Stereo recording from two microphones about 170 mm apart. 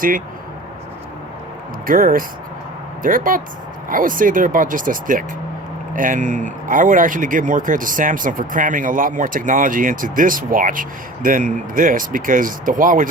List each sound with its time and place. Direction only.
1.9 s speech: 55° right (ahead or behind)